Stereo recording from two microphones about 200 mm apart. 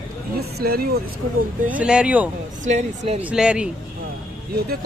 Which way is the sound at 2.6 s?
35° right (ahead or behind).